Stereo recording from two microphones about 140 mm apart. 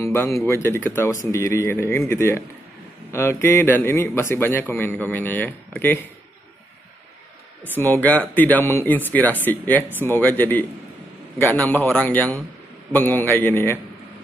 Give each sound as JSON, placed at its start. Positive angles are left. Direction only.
{"t": 0.0, "sound": "a man's voice", "side_deg": 20}
{"t": 7.6, "sound": "a man's voice", "side_deg": 15}
{"t": 11.6, "sound": "a man's voice", "side_deg": 10}